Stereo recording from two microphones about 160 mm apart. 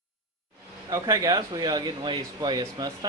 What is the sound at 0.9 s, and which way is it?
Speech, 20° right (ahead or behind).